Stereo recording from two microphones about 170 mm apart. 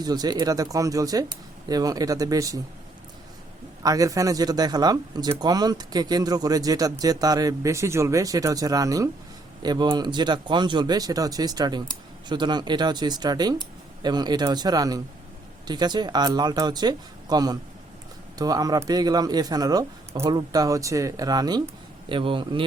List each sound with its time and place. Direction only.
0.0 s speech: 25° right (ahead or behind)
3.8 s a man's voice: 20° right (ahead or behind)